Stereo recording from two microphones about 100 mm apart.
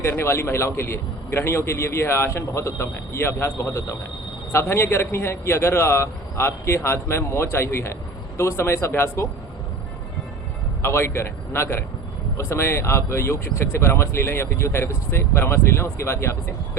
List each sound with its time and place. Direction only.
0.0 s speech: 25° left (ahead or behind)
10.8 s speech: 25° left (ahead or behind)